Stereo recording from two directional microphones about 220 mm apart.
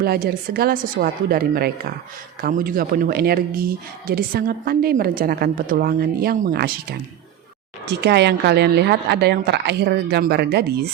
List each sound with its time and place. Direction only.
0.0 s speech: 45° right (ahead or behind)